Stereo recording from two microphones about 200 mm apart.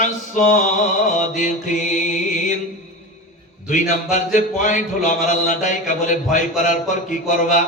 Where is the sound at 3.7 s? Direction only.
40° left (ahead or behind).